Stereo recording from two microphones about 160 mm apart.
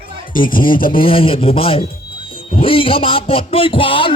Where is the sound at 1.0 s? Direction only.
35° left (ahead or behind).